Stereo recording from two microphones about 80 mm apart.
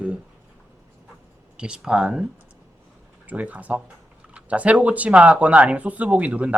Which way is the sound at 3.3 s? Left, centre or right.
Centre.